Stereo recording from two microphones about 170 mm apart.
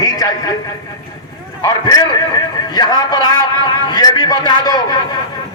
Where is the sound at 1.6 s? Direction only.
20° left (ahead or behind).